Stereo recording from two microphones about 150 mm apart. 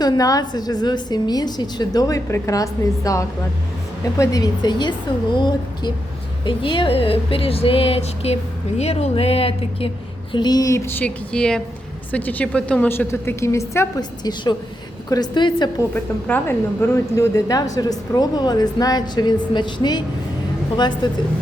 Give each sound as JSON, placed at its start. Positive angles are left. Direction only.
{"t": 0.0, "sound": "a woman's voice", "side_deg": 25}
{"t": 10.3, "sound": "a woman's voice", "side_deg": 30}
{"t": 15.1, "sound": "a woman's voice", "side_deg": 30}
{"t": 16.2, "sound": "a woman's voice", "side_deg": 15}